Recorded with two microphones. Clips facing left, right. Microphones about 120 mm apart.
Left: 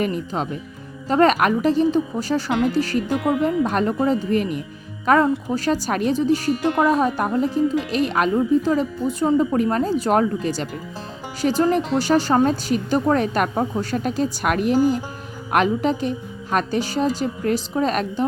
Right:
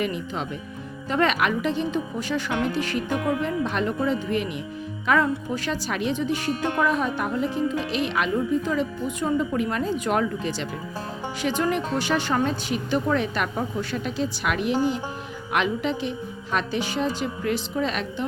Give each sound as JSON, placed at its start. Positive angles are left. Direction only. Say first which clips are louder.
{"t": 0.0, "sound": "a woman's voice", "louder": "left 4 dB", "side_deg": 40}